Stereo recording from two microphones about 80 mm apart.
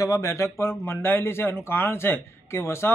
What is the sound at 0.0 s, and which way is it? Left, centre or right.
Speech, left.